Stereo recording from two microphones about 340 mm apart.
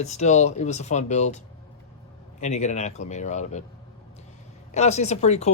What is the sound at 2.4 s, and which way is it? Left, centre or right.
Speech, left.